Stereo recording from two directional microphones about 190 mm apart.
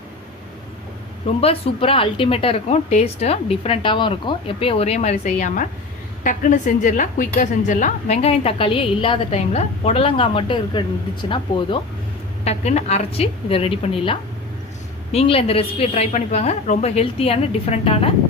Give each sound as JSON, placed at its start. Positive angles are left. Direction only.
{"t": 1.4, "sound": "speech", "side_deg": 30}